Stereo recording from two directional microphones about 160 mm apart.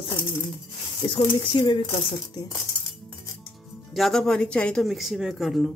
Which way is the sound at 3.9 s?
Centre (ahead or behind).